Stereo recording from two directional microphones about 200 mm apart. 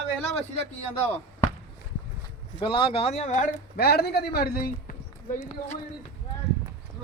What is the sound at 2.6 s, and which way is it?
Speech, 25° left (ahead or behind).